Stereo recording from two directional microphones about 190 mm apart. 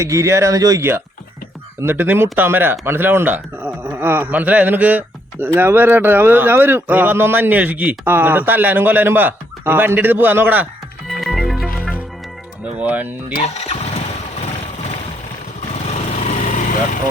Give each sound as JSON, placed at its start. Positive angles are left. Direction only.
{"t": 0.0, "sound": "speech", "side_deg": -15}
{"t": 11.1, "sound": "music", "side_deg": 0}
{"t": 12.6, "sound": "speech", "side_deg": -5}
{"t": 13.4, "sound": "speech", "side_deg": 35}
{"t": 15.7, "sound": "lawn mower", "side_deg": 35}